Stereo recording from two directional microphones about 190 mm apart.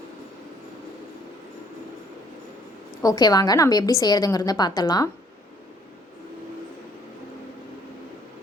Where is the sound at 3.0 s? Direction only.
20° left (ahead or behind).